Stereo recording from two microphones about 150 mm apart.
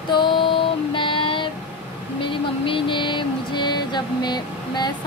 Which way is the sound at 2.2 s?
35° left (ahead or behind).